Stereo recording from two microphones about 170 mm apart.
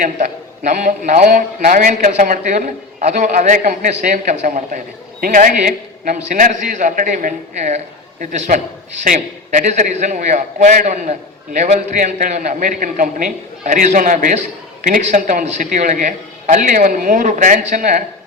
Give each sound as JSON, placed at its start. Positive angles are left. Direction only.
{"t": 0.0, "sound": "a man's voice", "side_deg": -50}